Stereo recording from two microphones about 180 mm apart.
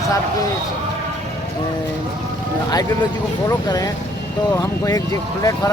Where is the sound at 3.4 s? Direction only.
20° left (ahead or behind).